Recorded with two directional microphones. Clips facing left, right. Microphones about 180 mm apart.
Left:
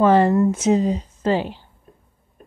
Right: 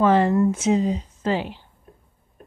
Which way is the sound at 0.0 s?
40° left (ahead or behind).